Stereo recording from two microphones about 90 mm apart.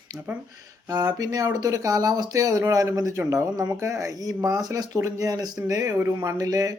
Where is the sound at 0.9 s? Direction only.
45° right (ahead or behind).